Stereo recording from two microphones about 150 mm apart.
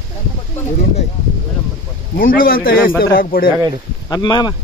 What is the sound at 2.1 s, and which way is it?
Speech, 70° left (ahead or behind).